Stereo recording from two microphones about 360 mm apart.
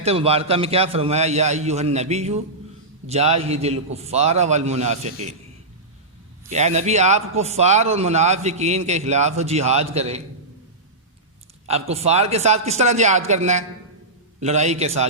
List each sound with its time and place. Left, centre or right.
0.0 s a man's voice: centre
6.5 s a man's voice: centre
11.7 s a man's voice: centre